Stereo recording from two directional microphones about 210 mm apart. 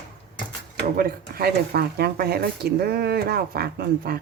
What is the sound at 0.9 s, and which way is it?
Speech, 45° right (ahead or behind).